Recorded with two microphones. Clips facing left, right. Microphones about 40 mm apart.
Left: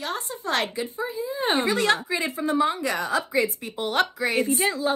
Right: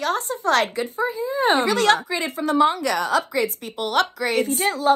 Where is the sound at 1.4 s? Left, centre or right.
Right.